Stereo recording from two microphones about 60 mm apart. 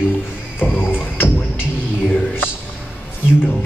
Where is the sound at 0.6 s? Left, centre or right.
Left.